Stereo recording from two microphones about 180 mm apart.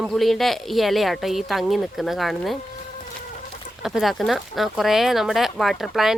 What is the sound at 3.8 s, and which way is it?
Speech, centre (ahead or behind).